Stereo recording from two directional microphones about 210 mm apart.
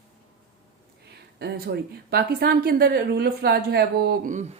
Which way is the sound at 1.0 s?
50° right (ahead or behind).